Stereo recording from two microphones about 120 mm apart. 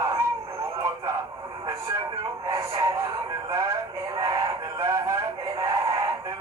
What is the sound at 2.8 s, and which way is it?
Music, 25° right (ahead or behind).